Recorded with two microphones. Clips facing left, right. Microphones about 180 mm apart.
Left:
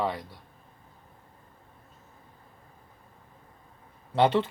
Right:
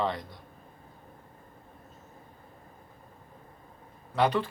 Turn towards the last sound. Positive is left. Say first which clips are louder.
# left 3 dB
turn(degrees=25)  # may be behind; listen again after turning